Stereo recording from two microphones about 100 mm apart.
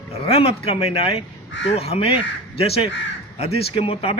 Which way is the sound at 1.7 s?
85° left.